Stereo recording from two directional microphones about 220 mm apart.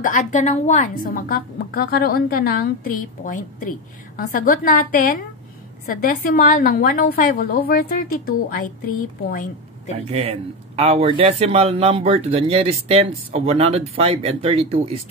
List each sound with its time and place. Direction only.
0.0 s a woman's voice: 35° left (ahead or behind)
10.0 s speech: 25° right (ahead or behind)